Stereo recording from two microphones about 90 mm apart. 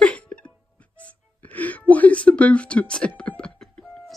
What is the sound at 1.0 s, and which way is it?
Music, 15° left (ahead or behind).